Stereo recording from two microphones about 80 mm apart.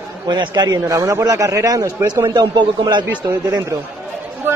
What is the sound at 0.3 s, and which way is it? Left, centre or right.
A man's voice, right.